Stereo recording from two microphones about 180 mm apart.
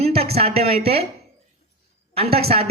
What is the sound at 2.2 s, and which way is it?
Speech, 35° right (ahead or behind).